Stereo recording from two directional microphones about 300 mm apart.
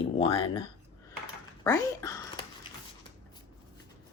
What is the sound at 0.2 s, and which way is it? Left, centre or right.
Speech, centre.